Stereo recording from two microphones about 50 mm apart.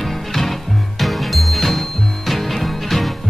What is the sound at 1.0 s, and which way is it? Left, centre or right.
Music, centre.